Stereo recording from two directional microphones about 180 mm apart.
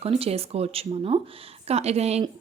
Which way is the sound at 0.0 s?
35° right (ahead or behind).